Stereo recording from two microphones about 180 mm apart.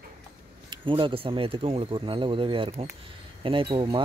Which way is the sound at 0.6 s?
30° right (ahead or behind).